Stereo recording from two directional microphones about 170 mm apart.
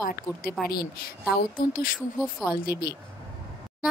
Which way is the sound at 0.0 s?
55° left (ahead or behind).